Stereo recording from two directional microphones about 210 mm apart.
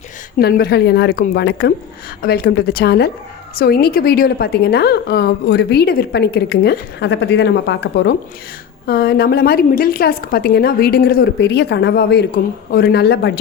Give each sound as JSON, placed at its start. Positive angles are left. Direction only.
{"t": 0.3, "sound": "a woman's voice", "side_deg": 45}